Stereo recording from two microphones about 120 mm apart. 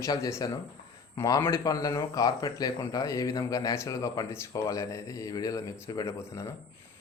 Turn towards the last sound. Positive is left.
turn(degrees=25)  # may be behind; listen again after turning